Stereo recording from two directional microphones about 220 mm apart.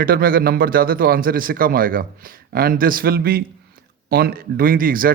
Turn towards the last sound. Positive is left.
turn(degrees=-40)  # may be behind; listen again after turning